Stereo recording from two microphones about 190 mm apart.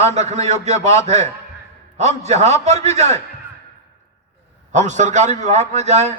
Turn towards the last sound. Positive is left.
turn(degrees=-35)  # may be behind; listen again after turning